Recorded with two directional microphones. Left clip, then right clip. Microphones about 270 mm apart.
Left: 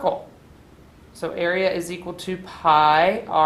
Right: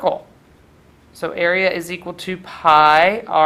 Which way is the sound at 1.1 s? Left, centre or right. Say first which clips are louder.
Right 5 dB; centre.